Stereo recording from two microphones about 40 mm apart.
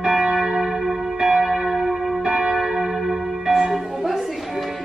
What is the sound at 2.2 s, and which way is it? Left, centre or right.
Church bell, right.